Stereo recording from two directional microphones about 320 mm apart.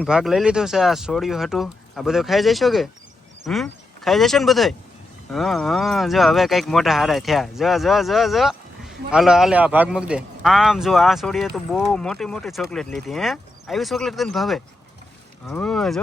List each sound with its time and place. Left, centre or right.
0.0 s speech: centre